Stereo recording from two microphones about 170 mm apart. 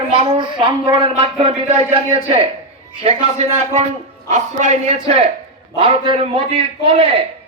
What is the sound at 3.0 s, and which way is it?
A man's voice, 40° right (ahead or behind).